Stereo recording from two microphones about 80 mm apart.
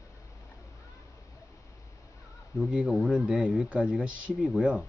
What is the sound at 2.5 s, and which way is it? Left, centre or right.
Speech, centre.